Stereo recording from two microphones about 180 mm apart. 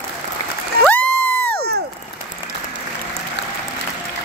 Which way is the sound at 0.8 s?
10° left (ahead or behind).